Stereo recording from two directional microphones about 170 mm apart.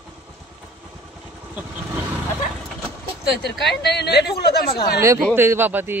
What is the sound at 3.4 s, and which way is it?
Speech, 80° left.